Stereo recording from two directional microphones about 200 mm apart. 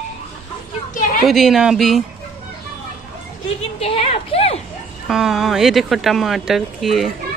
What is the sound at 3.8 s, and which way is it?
Speech, 30° left (ahead or behind).